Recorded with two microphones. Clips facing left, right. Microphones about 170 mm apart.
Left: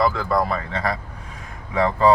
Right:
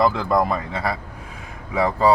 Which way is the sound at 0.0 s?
20° right (ahead or behind).